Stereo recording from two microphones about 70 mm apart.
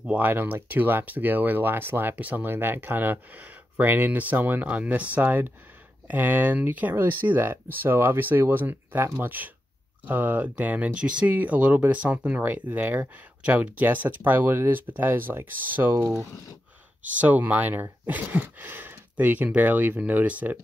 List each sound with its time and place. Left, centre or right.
0.0 s speech: right
17.2 s speech: right